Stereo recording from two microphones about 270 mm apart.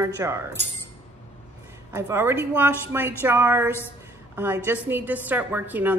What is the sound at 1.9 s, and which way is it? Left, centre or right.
A woman's voice, centre.